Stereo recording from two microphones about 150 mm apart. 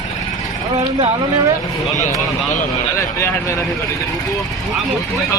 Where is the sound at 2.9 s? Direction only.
20° left (ahead or behind).